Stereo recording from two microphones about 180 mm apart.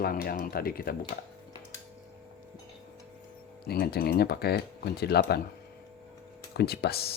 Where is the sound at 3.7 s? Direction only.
60° left (ahead or behind).